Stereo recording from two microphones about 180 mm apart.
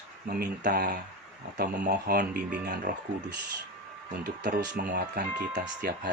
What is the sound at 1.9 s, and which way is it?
Speech, 60° right (ahead or behind).